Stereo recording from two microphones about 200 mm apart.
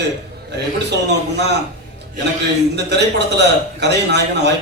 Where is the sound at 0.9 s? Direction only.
60° right (ahead or behind).